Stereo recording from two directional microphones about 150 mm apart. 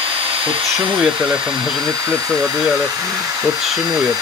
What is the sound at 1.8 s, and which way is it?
Speech, 20° right (ahead or behind).